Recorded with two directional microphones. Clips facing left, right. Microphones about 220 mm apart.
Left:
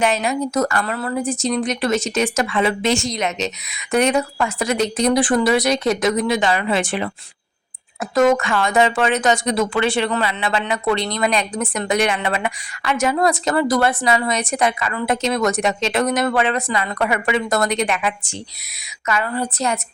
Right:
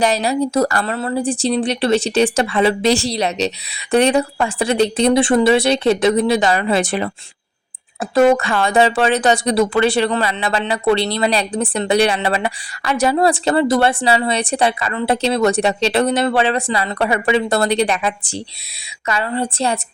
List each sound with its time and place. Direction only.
0.0 s speech: 35° right (ahead or behind)
8.1 s a woman's voice: 30° right (ahead or behind)